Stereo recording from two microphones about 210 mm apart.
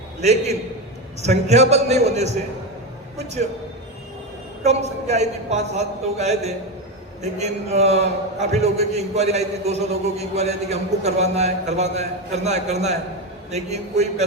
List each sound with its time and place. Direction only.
0.2 s a man's voice: 30° right (ahead or behind)
4.6 s a man's voice: 30° right (ahead or behind)